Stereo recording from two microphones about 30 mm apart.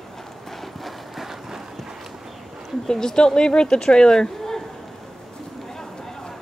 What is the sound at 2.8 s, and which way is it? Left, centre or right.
Speech, centre.